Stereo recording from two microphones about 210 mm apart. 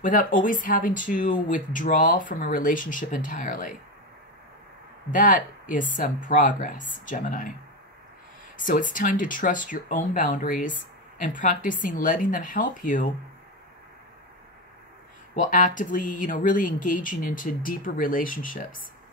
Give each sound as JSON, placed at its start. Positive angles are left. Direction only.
{"t": 0.0, "sound": "speech", "side_deg": 40}
{"t": 5.1, "sound": "speech", "side_deg": 40}
{"t": 8.5, "sound": "speech", "side_deg": 40}
{"t": 15.3, "sound": "speech", "side_deg": 40}